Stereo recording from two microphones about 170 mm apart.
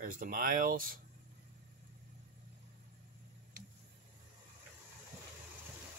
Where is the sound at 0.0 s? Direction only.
55° right (ahead or behind).